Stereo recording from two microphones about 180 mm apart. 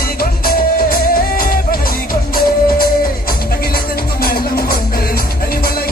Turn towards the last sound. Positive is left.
turn(degrees=55)  # may be behind; listen again after turning